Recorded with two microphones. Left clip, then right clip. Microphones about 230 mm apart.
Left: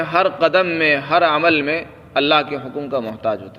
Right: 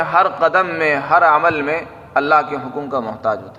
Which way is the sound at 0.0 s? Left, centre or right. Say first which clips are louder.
Right 2 dB; left.